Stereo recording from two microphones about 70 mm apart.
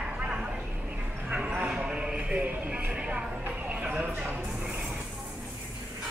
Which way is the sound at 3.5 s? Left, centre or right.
Centre.